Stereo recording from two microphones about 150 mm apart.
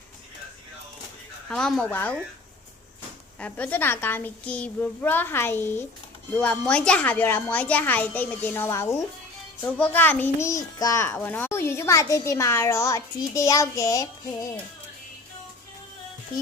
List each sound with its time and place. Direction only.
1.5 s a woman's voice: 5° left (ahead or behind)
3.3 s a woman's voice: 10° left (ahead or behind)